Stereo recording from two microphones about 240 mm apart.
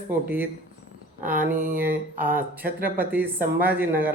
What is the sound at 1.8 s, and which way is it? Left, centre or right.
Speech, centre.